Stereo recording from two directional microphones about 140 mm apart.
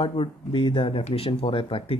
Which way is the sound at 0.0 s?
40° left (ahead or behind).